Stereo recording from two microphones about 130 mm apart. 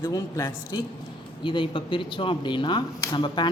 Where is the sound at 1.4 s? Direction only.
40° left (ahead or behind).